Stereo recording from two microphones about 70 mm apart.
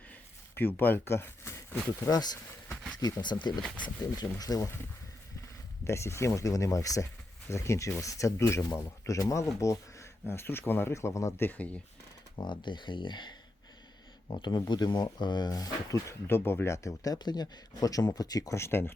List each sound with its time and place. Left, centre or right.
0.5 s speech: left
2.0 s speech: left
3.8 s speech: left
5.8 s speech: left
7.4 s speech: left
10.9 s speech: left
11.4 s speech: left
12.4 s speech: left
14.7 s speech: left
16.0 s speech: left
17.2 s speech: left
18.5 s speech: left